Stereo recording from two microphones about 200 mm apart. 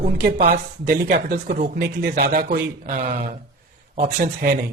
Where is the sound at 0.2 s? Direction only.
50° right (ahead or behind).